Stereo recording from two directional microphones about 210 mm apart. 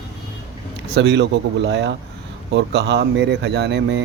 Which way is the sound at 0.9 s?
55° right (ahead or behind).